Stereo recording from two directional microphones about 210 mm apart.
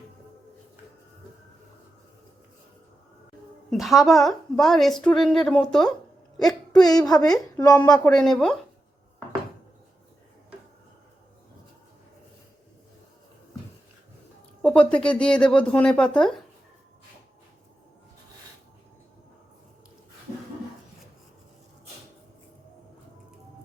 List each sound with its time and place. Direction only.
3.7 s a woman's voice: centre (ahead or behind)
6.5 s a woman's voice: 20° left (ahead or behind)
8.1 s a woman's voice: centre (ahead or behind)
14.6 s a woman's voice: 5° left (ahead or behind)